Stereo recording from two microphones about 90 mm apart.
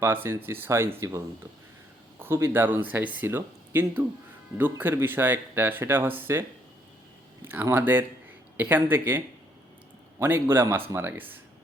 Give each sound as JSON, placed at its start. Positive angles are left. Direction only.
{"t": 0.0, "sound": "speech", "side_deg": -25}
{"t": 7.4, "sound": "speech", "side_deg": -25}